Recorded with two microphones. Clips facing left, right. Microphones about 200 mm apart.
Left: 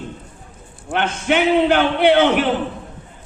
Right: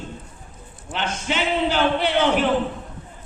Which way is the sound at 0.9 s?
60° left (ahead or behind).